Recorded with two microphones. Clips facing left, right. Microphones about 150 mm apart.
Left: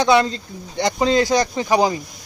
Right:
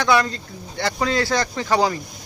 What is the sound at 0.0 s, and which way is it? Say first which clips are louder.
Speech: left 3 dB; 20° left (ahead or behind).